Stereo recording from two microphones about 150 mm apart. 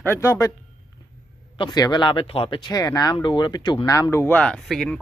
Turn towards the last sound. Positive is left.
turn(degrees=5)  # may be behind; listen again after turning